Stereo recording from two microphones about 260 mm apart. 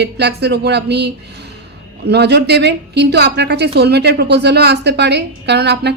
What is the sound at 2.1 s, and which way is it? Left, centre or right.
A woman's voice, right.